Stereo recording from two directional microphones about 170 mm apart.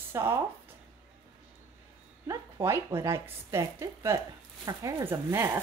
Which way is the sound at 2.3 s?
15° right (ahead or behind).